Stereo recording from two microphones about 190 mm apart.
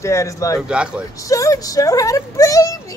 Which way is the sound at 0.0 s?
15° left (ahead or behind).